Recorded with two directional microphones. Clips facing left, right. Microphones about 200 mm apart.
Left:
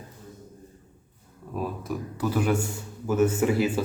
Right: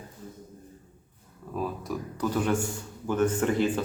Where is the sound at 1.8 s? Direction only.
5° left (ahead or behind).